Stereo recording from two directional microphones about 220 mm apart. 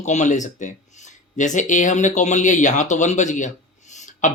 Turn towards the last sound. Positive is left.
turn(degrees=35)  # may be behind; listen again after turning